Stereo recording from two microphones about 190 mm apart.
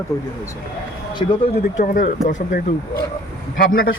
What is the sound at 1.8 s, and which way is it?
Speech, 45° left (ahead or behind).